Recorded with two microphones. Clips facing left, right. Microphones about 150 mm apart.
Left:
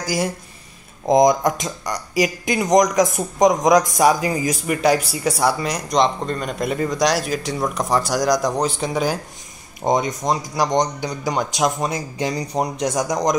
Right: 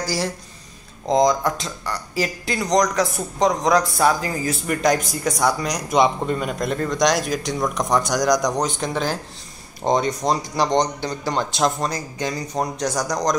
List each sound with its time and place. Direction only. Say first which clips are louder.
0.0 s speech: left 2 dB; 20° left (ahead or behind)